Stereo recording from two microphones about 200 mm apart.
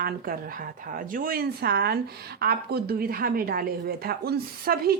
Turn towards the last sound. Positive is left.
turn(degrees=-50)  # may be behind; listen again after turning